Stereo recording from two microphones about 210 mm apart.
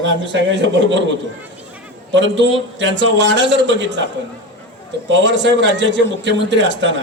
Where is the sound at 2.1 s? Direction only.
60° right (ahead or behind).